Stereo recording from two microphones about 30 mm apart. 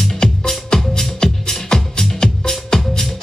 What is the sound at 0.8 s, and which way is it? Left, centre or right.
Music, centre.